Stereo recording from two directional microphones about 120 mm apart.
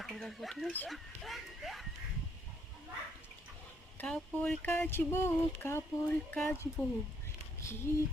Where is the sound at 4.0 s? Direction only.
10° left (ahead or behind).